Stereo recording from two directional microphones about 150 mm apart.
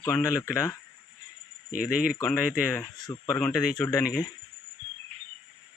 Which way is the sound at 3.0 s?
30° left (ahead or behind).